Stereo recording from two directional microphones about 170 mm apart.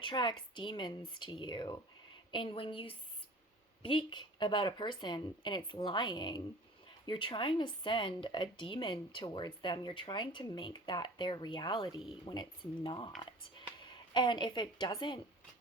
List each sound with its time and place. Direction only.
0.0 s speech: 25° left (ahead or behind)